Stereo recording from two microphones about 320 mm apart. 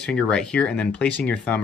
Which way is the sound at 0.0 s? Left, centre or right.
Centre.